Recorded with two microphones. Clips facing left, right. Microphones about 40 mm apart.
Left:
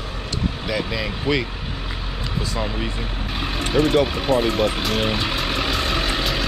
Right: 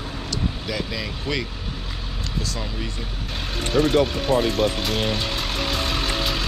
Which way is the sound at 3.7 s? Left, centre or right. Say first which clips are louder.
Left 1 dB; centre.